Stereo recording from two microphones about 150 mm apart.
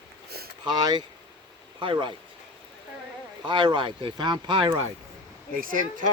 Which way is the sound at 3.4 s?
30° right (ahead or behind).